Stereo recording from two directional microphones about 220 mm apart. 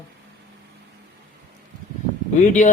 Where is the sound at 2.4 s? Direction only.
35° left (ahead or behind).